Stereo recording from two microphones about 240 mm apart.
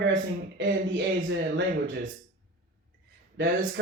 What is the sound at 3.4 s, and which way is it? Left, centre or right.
Speech, right.